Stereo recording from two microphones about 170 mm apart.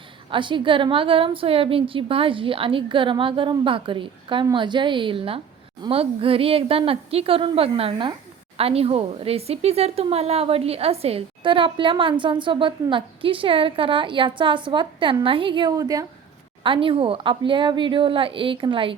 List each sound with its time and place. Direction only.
0.3 s speech: 30° right (ahead or behind)